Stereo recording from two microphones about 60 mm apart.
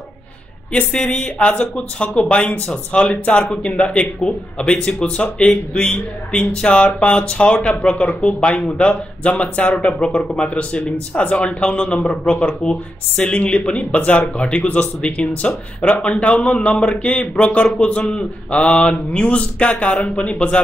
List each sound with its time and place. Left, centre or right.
0.9 s speech: centre